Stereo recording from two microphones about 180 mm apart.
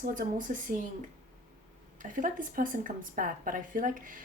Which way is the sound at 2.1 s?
50° right (ahead or behind).